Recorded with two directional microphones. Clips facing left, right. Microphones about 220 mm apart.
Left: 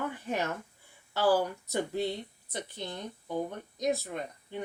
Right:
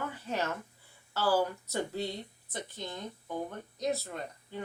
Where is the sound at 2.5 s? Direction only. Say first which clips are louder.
Left 2 dB; 15° left (ahead or behind).